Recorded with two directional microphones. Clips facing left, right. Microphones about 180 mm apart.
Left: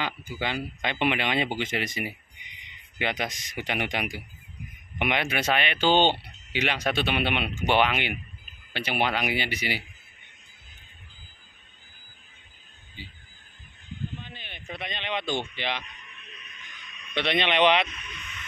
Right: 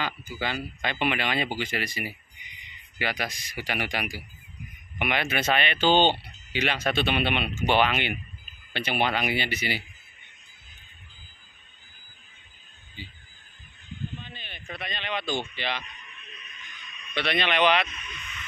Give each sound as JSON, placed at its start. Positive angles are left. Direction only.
{"t": 0.0, "sound": "speech", "side_deg": 20}
{"t": 14.2, "sound": "speech", "side_deg": 15}
{"t": 17.1, "sound": "speech", "side_deg": 20}